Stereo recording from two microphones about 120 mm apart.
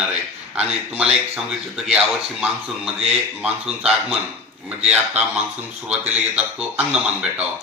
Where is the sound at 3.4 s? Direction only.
5° right (ahead or behind).